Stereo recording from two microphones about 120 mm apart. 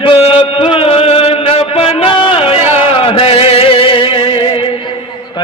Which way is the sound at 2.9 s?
50° left (ahead or behind).